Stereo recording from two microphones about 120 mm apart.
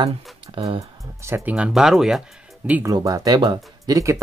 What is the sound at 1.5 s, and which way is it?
Speech, 5° right (ahead or behind).